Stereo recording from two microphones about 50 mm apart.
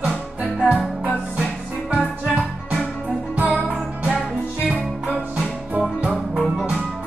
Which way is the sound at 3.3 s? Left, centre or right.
Right.